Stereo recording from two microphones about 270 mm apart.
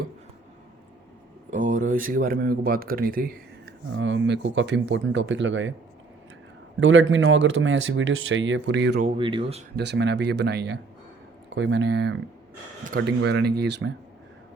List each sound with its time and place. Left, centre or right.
1.5 s speech: right
6.7 s speech: right
9.0 s speech: right
9.7 s speech: right